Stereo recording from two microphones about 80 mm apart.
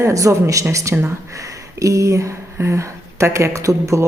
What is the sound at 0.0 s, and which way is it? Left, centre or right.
Speech, right.